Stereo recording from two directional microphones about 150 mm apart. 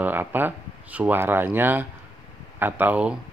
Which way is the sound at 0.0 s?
10° right (ahead or behind).